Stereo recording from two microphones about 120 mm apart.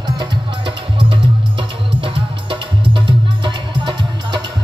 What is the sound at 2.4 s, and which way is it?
Music, 40° right (ahead or behind).